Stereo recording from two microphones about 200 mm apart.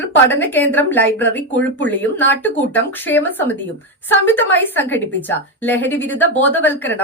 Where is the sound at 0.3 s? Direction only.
10° left (ahead or behind).